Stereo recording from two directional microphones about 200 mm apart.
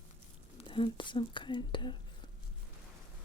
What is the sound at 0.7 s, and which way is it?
Speech, 25° left (ahead or behind).